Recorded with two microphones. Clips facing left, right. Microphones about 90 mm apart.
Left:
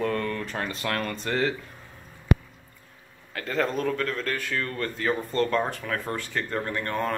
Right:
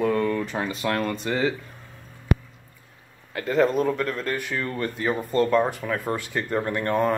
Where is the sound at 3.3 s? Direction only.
10° right (ahead or behind).